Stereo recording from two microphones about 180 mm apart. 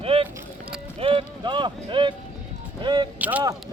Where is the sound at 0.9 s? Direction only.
30° right (ahead or behind).